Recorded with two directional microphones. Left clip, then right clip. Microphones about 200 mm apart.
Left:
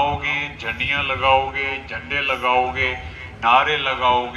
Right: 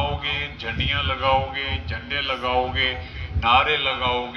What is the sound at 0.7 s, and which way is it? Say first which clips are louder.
A man's voice: left 3 dB; 55° right (ahead or behind).